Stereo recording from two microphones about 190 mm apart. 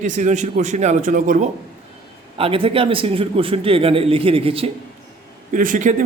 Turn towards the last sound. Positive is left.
turn(degrees=-40)  # may be behind; listen again after turning